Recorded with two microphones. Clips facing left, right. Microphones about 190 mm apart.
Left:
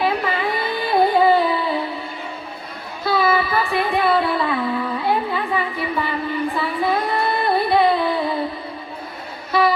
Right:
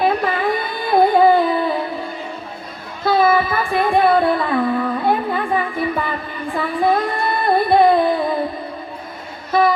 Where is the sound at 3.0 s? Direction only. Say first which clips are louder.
Right 4 dB; 50° right (ahead or behind).